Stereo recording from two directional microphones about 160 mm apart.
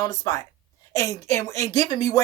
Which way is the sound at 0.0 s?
20° left (ahead or behind).